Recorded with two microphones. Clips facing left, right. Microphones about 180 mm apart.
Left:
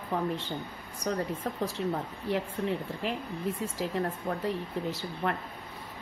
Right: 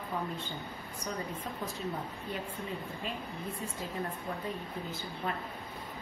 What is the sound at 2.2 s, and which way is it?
Speech, 75° left (ahead or behind).